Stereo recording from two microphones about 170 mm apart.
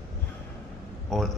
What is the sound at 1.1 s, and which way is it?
Speech, centre (ahead or behind).